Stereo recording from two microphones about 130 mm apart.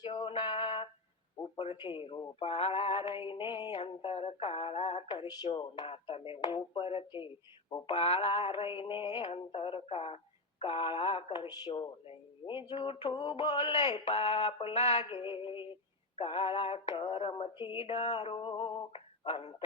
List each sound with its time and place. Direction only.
0.0 s music: 40° left (ahead or behind)
1.8 s speech: 40° left (ahead or behind)
3.1 s speech: 40° left (ahead or behind)
3.8 s speech: 50° left (ahead or behind)
5.5 s speech: 40° left (ahead or behind)
7.9 s a sound: 55° left (ahead or behind)
8.4 s speech: 45° left (ahead or behind)
14.0 s a sound: 55° left (ahead or behind)
14.4 s speech: 45° left (ahead or behind)
15.1 s speech: 40° left (ahead or behind)
16.9 s speech: 40° left (ahead or behind)